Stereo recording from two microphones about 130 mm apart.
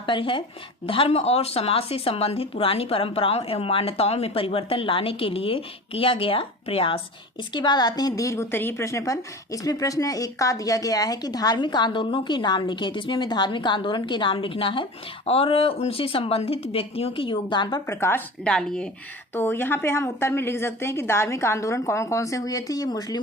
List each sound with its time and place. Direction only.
0.0 s a woman's voice: 40° left (ahead or behind)
7.5 s a woman's voice: 35° left (ahead or behind)
18.4 s speech: 5° left (ahead or behind)
19.3 s a woman's voice: 15° left (ahead or behind)